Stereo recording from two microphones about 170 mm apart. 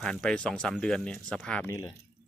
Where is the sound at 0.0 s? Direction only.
5° left (ahead or behind).